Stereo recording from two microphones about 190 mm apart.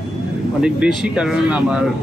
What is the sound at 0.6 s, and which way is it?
Speech, 5° right (ahead or behind).